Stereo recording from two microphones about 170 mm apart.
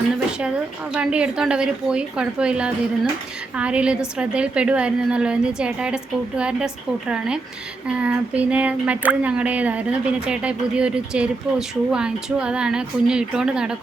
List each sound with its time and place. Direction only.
0.9 s speech: 5° right (ahead or behind)
7.9 s speech: 5° right (ahead or behind)